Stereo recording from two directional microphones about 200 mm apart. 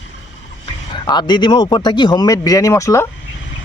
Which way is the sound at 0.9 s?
20° left (ahead or behind).